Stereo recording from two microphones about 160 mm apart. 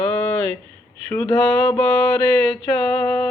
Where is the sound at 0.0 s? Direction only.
10° left (ahead or behind).